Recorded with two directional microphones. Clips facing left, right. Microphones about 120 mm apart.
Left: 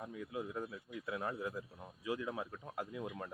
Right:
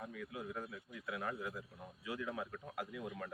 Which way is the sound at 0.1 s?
25° left (ahead or behind).